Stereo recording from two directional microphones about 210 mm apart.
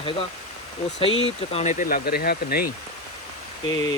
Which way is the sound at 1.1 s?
65° left (ahead or behind).